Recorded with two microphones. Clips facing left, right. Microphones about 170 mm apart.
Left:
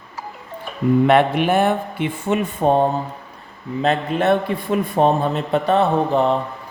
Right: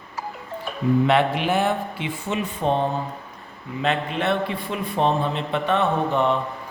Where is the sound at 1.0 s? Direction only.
55° left (ahead or behind).